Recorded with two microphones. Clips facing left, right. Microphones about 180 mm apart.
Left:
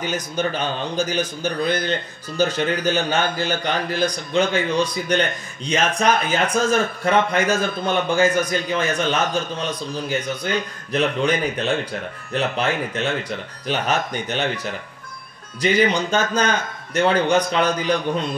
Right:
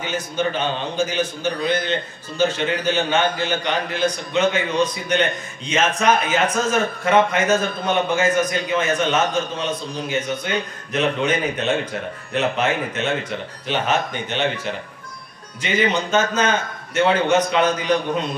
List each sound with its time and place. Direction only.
0.0 s a man's voice: 40° left (ahead or behind)